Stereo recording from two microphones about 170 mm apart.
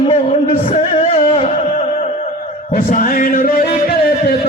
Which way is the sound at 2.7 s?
55° left (ahead or behind).